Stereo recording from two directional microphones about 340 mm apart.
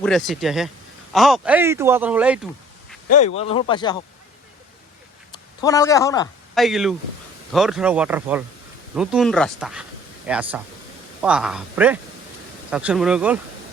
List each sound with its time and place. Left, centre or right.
0.0 s speech: centre
3.2 s a man's voice: centre
5.6 s a man's voice: centre